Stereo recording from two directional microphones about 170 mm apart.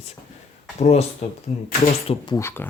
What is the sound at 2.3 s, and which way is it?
Speech, 15° left (ahead or behind).